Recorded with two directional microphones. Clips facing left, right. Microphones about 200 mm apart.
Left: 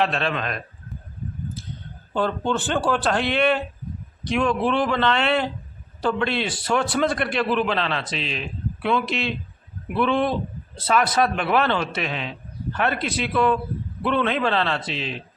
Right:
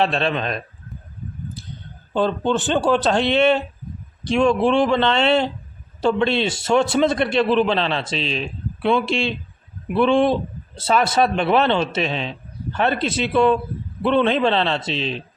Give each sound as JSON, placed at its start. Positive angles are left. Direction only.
{"t": 0.0, "sound": "a man's voice", "side_deg": -30}
{"t": 2.1, "sound": "a man's voice", "side_deg": -20}